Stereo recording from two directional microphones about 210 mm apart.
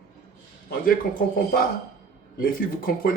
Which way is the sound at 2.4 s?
45° left (ahead or behind).